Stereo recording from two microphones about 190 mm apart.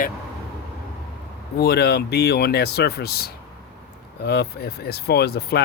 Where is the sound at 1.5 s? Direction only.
55° left (ahead or behind).